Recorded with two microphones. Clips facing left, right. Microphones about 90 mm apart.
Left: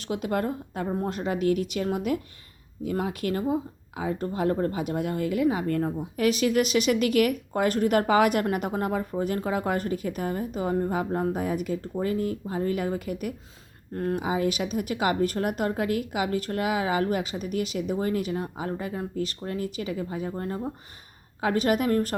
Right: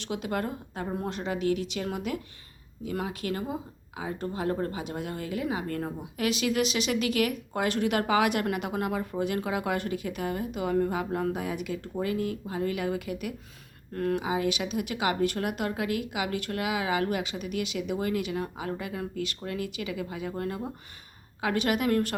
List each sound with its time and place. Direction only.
0.0 s speech: 45° left (ahead or behind)
13.9 s speech: 30° left (ahead or behind)
14.2 s speech: 45° left (ahead or behind)